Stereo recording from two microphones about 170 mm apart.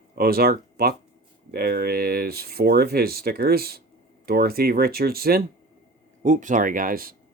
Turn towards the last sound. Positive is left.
turn(degrees=-55)  # may be behind; listen again after turning